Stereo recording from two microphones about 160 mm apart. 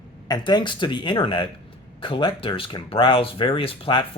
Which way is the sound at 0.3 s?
25° left (ahead or behind).